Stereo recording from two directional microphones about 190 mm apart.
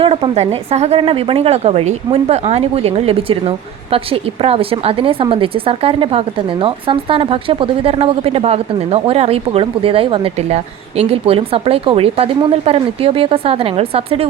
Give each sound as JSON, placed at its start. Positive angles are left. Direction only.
{"t": 0.0, "sound": "speech", "side_deg": -30}